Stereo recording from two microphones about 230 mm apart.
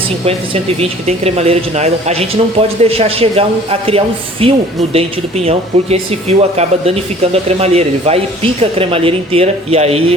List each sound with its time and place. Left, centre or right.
0.3 s speech: right